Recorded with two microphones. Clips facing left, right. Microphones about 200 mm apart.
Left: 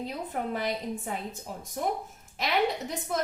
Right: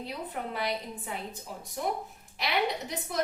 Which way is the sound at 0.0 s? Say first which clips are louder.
Left 3 dB; 45° left (ahead or behind).